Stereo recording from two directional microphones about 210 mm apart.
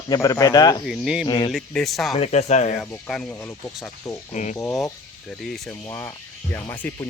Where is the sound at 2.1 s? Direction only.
30° left (ahead or behind).